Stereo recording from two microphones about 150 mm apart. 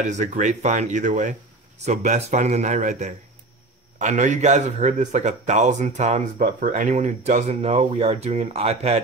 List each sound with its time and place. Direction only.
0.1 s speech: 55° right (ahead or behind)
6.4 s speech: 65° right (ahead or behind); by 9.0 s 45° right (ahead or behind)